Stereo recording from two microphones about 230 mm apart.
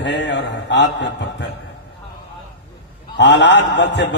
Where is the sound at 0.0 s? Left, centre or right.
Left.